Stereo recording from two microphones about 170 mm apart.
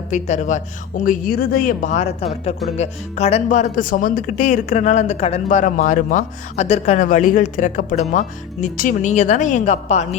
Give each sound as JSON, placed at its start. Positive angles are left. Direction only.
{"t": 0.1, "sound": "speech", "side_deg": 45}